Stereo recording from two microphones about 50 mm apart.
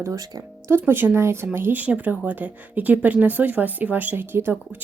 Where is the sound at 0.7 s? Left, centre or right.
Right.